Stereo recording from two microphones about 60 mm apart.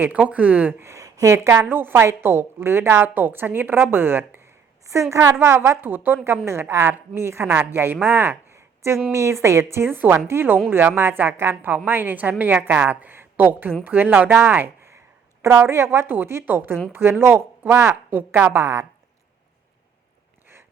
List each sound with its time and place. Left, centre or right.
0.2 s speech: right
0.8 s speech: right
1.0 s a sound: right
1.6 s a woman's voice: right
5.1 s a woman's voice: right
6.2 s a woman's voice: right
9.1 s a woman's voice: right
14.3 s a sound: right
15.5 s a woman's voice: right